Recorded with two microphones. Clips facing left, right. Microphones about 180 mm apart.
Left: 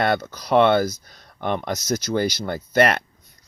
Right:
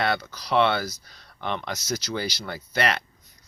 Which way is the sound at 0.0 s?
50° left (ahead or behind).